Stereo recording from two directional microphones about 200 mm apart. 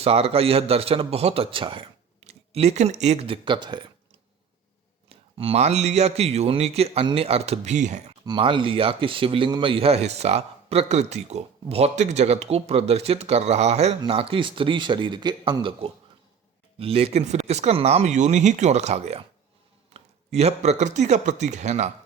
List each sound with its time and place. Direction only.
0.0 s speech: 30° right (ahead or behind)
5.0 s a man's voice: 30° right (ahead or behind)
8.2 s a man's voice: 25° right (ahead or behind)